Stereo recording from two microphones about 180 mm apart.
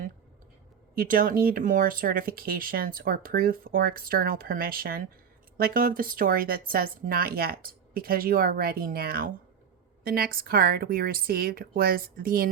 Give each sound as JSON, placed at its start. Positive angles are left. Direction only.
{"t": 0.9, "sound": "speech", "side_deg": -50}